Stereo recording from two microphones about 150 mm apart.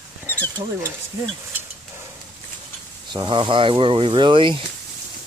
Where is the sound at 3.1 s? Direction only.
30° right (ahead or behind).